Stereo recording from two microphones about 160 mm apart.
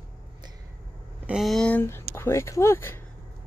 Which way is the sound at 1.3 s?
Centre (ahead or behind).